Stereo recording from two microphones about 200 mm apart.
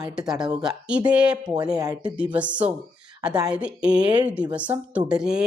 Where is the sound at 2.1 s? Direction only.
5° right (ahead or behind).